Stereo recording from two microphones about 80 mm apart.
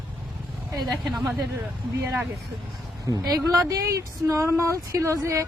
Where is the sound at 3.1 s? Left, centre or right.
Right.